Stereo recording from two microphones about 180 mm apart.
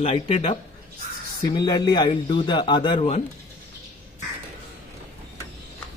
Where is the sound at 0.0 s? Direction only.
30° left (ahead or behind).